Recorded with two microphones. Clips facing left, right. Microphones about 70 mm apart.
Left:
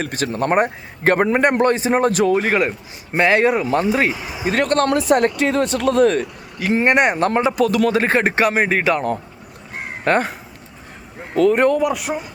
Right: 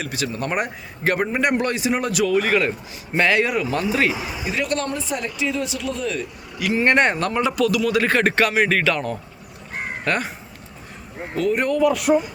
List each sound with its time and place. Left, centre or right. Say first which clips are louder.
0.0 s a man's voice: left 5 dB; left
4.1 s speech: right 1 dB; centre
4.4 s a man's voice: left 7 dB; left
4.9 s speech: left 11 dB; left
6.6 s a man's voice: left 3 dB; left
6.8 s speech: left 1 dB; centre
7.4 s speech: left 3 dB; left
10.0 s speech: left 7 dB; left
11.3 s a man's voice: left 6 dB; left
11.9 s speech: right 7 dB; centre